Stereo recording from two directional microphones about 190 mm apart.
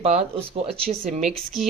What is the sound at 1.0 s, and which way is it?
Speech, 40° right (ahead or behind).